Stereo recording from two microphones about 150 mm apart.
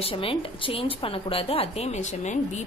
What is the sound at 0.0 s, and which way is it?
A woman's voice, 35° left (ahead or behind).